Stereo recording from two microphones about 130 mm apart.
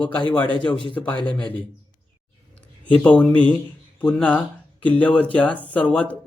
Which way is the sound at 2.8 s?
10° left (ahead or behind).